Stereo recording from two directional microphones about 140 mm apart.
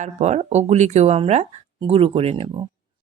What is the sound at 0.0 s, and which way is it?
Speech, 55° right (ahead or behind).